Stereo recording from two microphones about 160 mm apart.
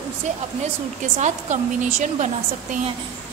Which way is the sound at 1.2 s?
45° right (ahead or behind).